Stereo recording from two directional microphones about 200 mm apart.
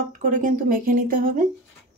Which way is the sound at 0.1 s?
40° right (ahead or behind).